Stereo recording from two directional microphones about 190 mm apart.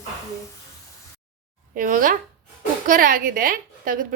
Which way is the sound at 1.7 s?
45° right (ahead or behind).